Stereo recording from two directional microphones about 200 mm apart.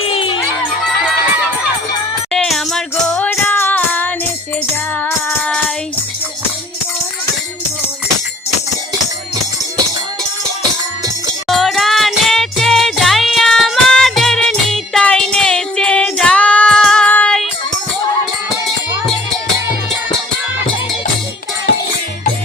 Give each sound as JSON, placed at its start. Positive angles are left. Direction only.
{"t": 0.0, "sound": "jingle bell", "side_deg": 25}
{"t": 2.3, "sound": "music", "side_deg": 0}
{"t": 11.4, "sound": "music", "side_deg": 0}